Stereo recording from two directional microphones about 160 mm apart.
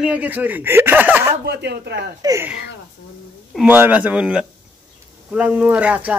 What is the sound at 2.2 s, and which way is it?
Speech, 20° right (ahead or behind).